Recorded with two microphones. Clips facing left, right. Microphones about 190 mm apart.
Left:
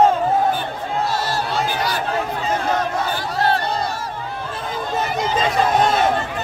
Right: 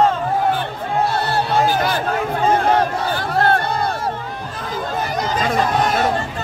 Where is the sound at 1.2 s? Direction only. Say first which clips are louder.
Right 5 dB; 55° right (ahead or behind).